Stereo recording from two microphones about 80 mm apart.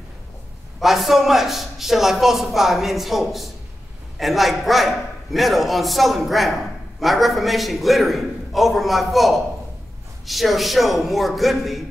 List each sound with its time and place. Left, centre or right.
0.7 s a man's voice: centre